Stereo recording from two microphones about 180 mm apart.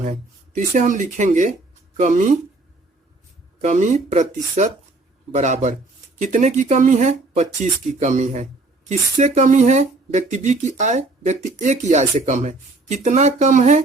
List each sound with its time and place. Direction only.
0.0 s speech: 40° right (ahead or behind)
3.6 s speech: 45° right (ahead or behind)